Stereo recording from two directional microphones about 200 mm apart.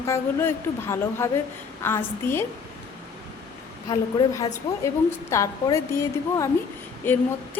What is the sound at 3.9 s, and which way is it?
A woman's voice, 20° left (ahead or behind).